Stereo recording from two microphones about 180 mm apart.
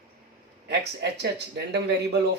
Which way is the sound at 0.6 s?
65° right (ahead or behind).